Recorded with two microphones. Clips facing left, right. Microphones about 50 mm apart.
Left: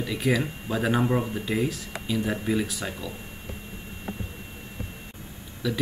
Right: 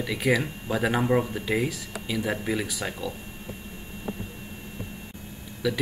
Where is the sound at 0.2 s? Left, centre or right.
Centre.